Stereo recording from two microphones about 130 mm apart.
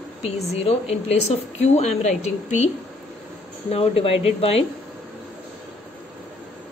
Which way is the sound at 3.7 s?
50° left (ahead or behind).